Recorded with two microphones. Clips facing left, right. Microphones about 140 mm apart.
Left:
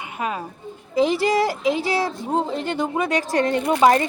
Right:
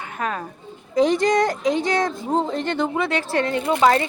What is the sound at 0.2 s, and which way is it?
A woman's voice, 10° left (ahead or behind).